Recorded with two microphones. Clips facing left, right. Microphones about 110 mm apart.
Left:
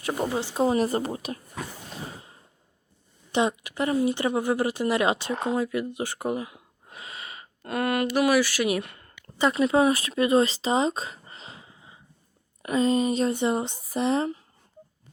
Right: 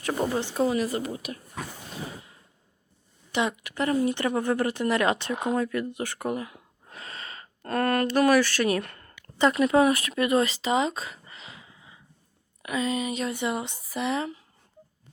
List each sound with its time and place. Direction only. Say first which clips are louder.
0.0 s speech: even; 15° left (ahead or behind)
0.5 s speech: left 5 dB; 25° left (ahead or behind)
3.3 s a woman's voice: left 3 dB; 20° left (ahead or behind)